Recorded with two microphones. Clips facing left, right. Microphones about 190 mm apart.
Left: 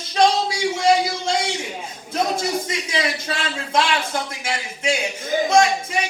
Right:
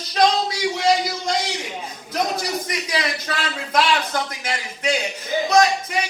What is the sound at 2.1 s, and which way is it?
A man's voice, 25° left (ahead or behind).